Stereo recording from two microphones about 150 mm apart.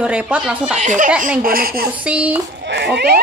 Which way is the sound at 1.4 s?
75° right (ahead or behind).